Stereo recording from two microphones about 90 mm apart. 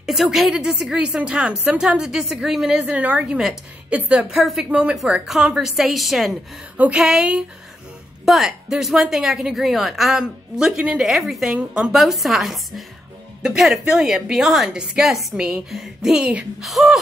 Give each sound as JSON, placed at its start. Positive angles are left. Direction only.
{"t": 0.0, "sound": "a woman's voice", "side_deg": -5}
{"t": 2.8, "sound": "a woman's voice", "side_deg": -15}
{"t": 4.3, "sound": "a woman's voice", "side_deg": -5}